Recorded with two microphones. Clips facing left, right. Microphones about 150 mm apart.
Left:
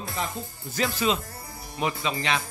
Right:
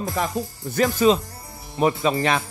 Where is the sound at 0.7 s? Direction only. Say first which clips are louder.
Right 8 dB; 45° right (ahead or behind).